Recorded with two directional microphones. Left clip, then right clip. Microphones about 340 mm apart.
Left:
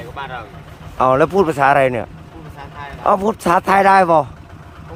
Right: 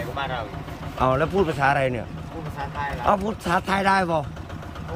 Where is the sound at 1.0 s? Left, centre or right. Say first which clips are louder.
Left 8 dB; centre.